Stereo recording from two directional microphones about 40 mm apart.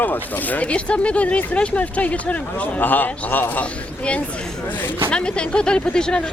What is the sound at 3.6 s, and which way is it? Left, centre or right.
Speech, left.